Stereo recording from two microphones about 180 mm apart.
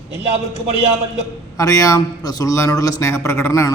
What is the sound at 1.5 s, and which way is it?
A man's voice, 20° left (ahead or behind).